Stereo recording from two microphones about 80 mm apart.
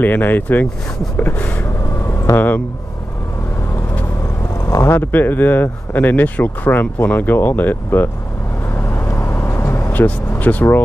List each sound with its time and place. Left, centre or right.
0.0 s speech: left
2.3 s speech: left
4.6 s vehicle: left
4.9 s speech: left
8.7 s vehicle: left
9.9 s speech: left